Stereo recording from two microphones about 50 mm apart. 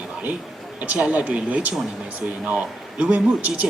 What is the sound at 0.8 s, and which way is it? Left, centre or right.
A woman's voice, right.